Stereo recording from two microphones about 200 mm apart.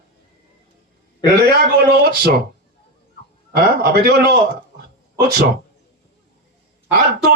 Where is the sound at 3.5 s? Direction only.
50° right (ahead or behind).